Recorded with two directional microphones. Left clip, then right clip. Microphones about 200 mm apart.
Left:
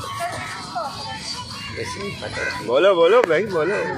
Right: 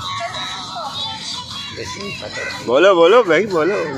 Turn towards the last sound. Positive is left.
turn(degrees=-45)  # may be behind; listen again after turning